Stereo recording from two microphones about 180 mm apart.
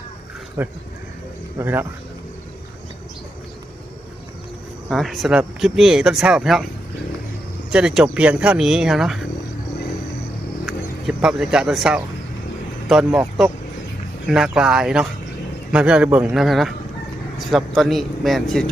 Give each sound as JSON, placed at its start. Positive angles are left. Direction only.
{"t": 0.6, "sound": "speech", "side_deg": -10}
{"t": 4.9, "sound": "speech", "side_deg": 0}
{"t": 7.7, "sound": "speech", "side_deg": -5}
{"t": 10.7, "sound": "speech", "side_deg": -5}
{"t": 16.3, "sound": "speech", "side_deg": 0}